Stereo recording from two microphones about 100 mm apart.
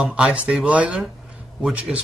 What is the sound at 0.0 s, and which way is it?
Speech, 10° right (ahead or behind).